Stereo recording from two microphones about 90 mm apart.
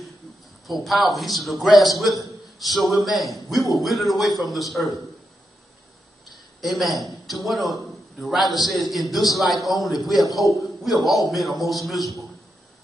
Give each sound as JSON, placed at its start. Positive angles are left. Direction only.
{"t": 0.7, "sound": "a man's voice", "side_deg": 0}
{"t": 6.3, "sound": "a man's voice", "side_deg": 0}